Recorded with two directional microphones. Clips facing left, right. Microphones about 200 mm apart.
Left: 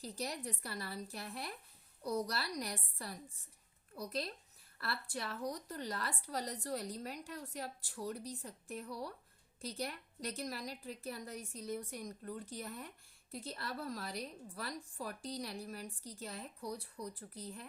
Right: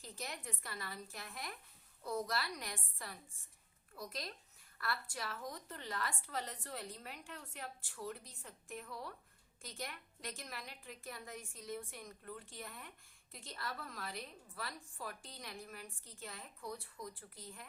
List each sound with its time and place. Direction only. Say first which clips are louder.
0.0 s a woman's voice: left 6 dB; 35° left (ahead or behind)